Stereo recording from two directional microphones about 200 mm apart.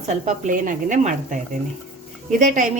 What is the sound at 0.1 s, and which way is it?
A woman's voice, 40° right (ahead or behind).